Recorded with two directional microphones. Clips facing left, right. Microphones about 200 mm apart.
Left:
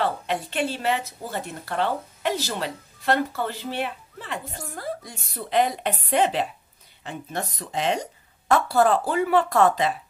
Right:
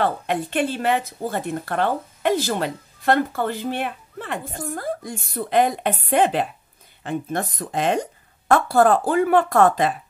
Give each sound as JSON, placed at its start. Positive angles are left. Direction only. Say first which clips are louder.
{"t": 0.0, "sound": "a woman's voice", "louder": "right 3 dB", "side_deg": -50}